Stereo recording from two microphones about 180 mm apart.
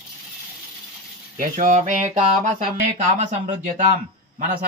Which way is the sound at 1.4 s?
45° right (ahead or behind).